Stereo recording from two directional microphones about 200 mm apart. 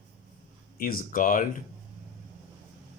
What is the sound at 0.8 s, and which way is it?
Speech, 45° left (ahead or behind).